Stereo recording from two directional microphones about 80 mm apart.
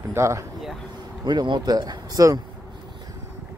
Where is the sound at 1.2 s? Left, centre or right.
Right.